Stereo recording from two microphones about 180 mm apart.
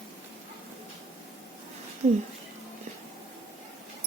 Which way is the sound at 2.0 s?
35° right (ahead or behind).